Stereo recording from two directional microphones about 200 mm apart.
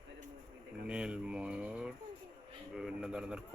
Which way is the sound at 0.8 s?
5° right (ahead or behind).